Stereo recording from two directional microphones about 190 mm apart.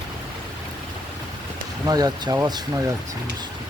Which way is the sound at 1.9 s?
20° right (ahead or behind).